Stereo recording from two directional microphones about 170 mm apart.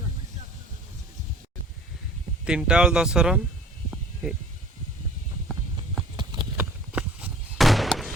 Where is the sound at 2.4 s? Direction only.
5° right (ahead or behind).